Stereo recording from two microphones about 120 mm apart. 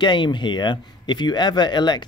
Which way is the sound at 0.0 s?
40° left (ahead or behind).